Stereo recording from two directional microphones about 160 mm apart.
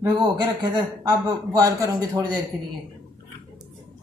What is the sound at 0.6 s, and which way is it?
A man's voice, 25° right (ahead or behind).